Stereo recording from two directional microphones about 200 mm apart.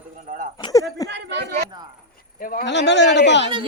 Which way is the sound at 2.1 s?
45° left (ahead or behind).